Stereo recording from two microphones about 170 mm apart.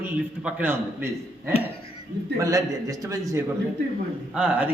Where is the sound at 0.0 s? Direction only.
10° right (ahead or behind).